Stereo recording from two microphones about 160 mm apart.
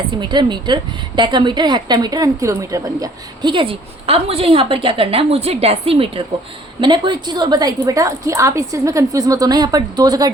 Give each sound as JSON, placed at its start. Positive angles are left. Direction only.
{"t": 0.2, "sound": "a woman's voice", "side_deg": -30}